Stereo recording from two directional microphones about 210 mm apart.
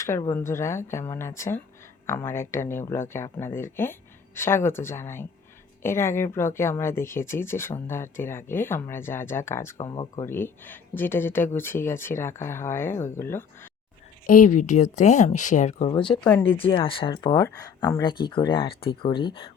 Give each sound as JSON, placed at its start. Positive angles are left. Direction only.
{"t": 0.0, "sound": "speech", "side_deg": 15}
{"t": 14.3, "sound": "speech", "side_deg": 40}
{"t": 15.9, "sound": "speech", "side_deg": 25}
{"t": 16.2, "sound": "speech", "side_deg": 10}
{"t": 16.6, "sound": "speech", "side_deg": 25}